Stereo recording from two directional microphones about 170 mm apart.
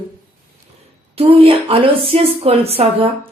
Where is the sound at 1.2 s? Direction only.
35° right (ahead or behind).